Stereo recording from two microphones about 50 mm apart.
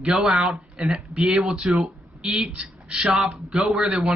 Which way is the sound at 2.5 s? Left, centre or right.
Centre.